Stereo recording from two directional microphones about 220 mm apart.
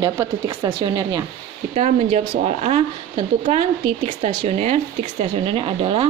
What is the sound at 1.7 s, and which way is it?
Speech, 30° right (ahead or behind).